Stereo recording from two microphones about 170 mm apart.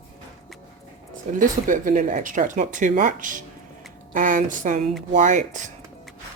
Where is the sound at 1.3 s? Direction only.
50° right (ahead or behind).